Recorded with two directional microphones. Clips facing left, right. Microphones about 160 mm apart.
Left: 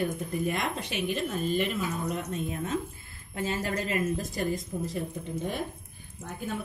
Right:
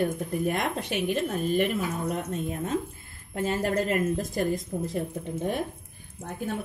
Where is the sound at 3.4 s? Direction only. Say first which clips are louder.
Right 5 dB; 55° right (ahead or behind).